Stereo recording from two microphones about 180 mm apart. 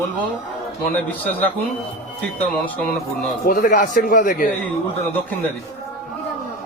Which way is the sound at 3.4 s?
50° left (ahead or behind).